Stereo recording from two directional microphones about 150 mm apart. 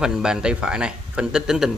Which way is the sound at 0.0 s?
5° right (ahead or behind).